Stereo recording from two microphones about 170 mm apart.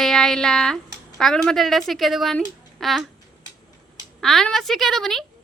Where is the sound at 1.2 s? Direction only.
5° left (ahead or behind).